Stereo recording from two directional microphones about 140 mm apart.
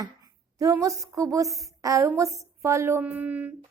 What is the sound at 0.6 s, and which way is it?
A woman's voice, 25° right (ahead or behind).